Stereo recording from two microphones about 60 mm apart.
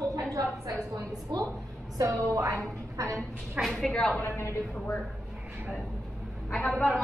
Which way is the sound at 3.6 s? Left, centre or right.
Centre.